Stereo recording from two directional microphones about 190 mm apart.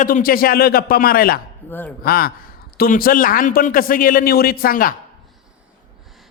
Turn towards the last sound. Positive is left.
turn(degrees=50)  # may be behind; listen again after turning